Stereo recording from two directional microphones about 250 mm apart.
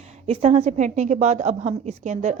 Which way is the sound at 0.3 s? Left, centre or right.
Right.